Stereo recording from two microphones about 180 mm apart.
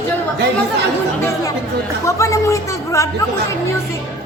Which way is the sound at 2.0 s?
15° left (ahead or behind).